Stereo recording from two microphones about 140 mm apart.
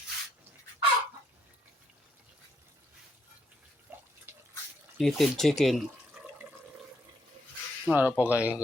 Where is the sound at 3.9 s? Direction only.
15° right (ahead or behind).